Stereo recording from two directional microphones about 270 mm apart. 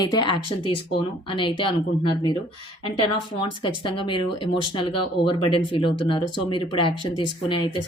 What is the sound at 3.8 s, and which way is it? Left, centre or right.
Speech, centre.